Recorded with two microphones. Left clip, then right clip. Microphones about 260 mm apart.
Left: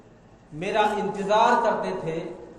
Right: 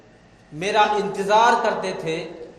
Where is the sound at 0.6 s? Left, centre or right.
Right.